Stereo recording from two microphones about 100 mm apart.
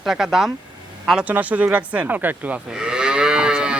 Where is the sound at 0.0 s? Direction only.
5° right (ahead or behind).